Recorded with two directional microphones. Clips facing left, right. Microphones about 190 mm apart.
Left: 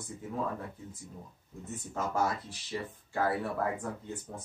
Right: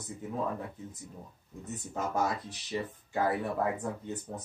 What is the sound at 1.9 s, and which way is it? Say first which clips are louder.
Speech: even; 20° right (ahead or behind).